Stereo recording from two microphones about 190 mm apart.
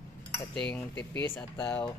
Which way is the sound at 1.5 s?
20° left (ahead or behind).